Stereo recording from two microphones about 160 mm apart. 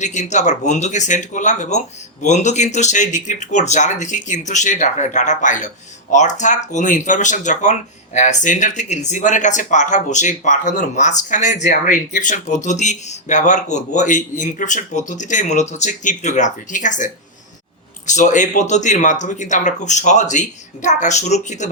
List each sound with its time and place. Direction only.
0.0 s speech: 50° left (ahead or behind)